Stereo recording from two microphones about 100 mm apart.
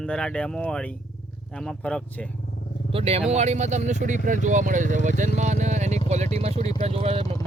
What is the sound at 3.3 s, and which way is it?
Speech, 90° right.